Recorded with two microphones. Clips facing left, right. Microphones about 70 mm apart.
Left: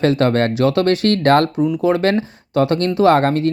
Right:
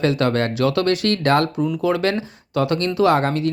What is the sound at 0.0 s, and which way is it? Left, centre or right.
Speech, left.